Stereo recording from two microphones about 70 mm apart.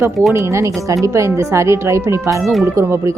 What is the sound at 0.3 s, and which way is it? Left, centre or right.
Speech, right.